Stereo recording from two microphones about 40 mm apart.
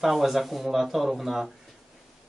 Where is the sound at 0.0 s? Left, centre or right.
Centre.